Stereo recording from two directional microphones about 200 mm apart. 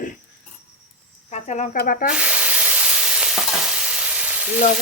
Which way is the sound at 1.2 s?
35° left (ahead or behind).